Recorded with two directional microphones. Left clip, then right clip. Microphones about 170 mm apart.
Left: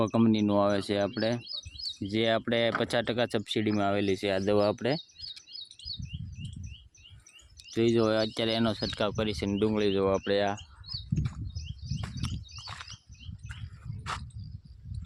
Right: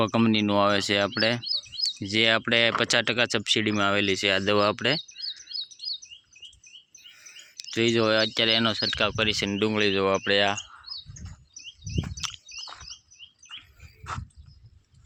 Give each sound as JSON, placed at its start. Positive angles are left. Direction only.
{"t": 0.0, "sound": "speech", "side_deg": 5}
{"t": 5.5, "sound": "chirp", "side_deg": 50}
{"t": 7.5, "sound": "speech", "side_deg": 10}
{"t": 11.9, "sound": "a sound", "side_deg": 5}